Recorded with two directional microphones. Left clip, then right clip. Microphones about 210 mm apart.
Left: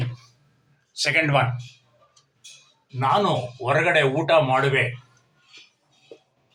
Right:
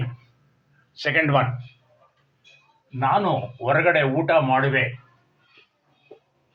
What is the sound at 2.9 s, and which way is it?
Speech, 25° right (ahead or behind).